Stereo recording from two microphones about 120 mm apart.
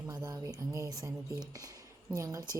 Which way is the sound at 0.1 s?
30° right (ahead or behind).